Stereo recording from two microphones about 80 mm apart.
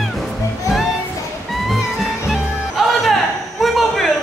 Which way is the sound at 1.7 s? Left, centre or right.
Centre.